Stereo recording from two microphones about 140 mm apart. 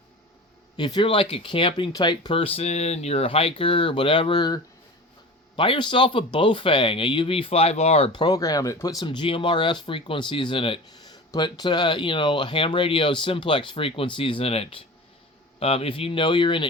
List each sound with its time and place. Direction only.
0.8 s speech: 35° left (ahead or behind)
8.2 s speech: 25° left (ahead or behind)